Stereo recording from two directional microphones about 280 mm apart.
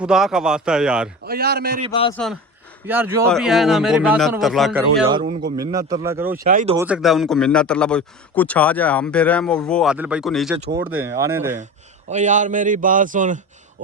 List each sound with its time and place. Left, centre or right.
0.0 s a man's voice: centre
1.2 s a man's voice: right
1.9 s a man's voice: centre
2.1 s a man's voice: centre
5.0 s a man's voice: right
5.7 s speech: centre
6.4 s a man's voice: right
6.7 s a man's voice: centre
12.0 s a man's voice: right